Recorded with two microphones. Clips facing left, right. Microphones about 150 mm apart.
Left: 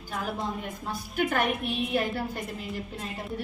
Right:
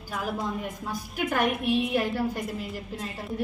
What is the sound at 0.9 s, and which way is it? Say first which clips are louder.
Speech: left 3 dB; 10° right (ahead or behind).